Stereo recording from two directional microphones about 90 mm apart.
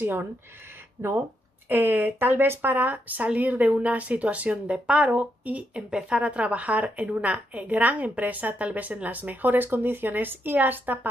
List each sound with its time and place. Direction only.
0.0 s speech: 20° right (ahead or behind)
1.7 s speech: 20° right (ahead or behind)